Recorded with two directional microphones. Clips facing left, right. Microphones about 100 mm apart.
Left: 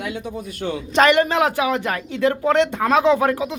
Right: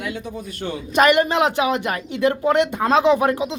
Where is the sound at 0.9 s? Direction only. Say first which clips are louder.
Even; 10° right (ahead or behind).